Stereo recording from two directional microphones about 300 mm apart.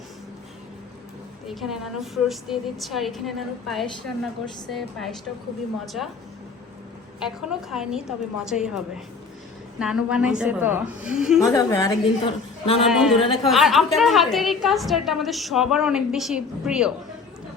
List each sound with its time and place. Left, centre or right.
1.5 s a woman's voice: centre
7.2 s a woman's voice: centre
11.3 s a woman's voice: centre
12.8 s a woman's voice: centre